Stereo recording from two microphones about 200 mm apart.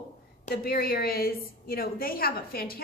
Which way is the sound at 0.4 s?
50° left (ahead or behind).